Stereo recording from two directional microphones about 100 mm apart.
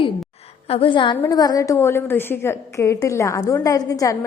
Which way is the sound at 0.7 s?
65° left (ahead or behind).